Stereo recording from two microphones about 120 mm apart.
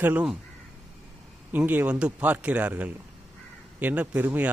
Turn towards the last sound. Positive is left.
turn(degrees=-15)  # may be behind; listen again after turning